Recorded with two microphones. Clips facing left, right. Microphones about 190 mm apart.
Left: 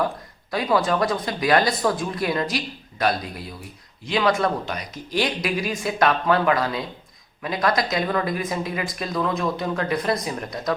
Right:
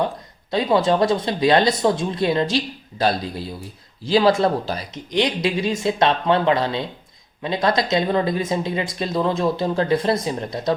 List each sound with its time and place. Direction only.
0.5 s speech: 25° right (ahead or behind)